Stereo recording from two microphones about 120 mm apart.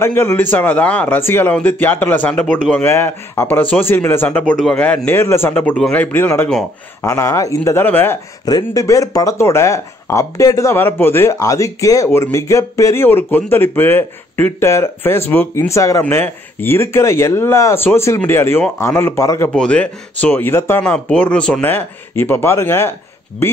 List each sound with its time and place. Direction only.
0.0 s speech: 20° left (ahead or behind)
8.5 s speech: 30° left (ahead or behind)
19.5 s speech: 10° left (ahead or behind)